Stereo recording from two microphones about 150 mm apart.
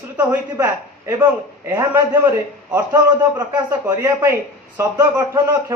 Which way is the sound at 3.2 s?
25° right (ahead or behind).